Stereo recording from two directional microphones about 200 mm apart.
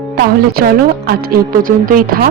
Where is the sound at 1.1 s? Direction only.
45° right (ahead or behind).